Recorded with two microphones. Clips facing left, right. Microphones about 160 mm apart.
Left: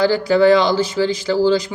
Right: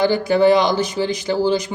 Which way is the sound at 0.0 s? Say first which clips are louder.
Left 1 dB; 20° right (ahead or behind).